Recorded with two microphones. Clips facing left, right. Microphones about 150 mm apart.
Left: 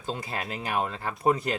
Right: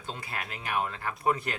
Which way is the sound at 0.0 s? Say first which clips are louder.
Left 5 dB; 35° left (ahead or behind).